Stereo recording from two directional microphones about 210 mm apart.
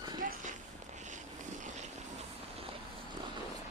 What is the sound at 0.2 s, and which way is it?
Walk, 40° right (ahead or behind).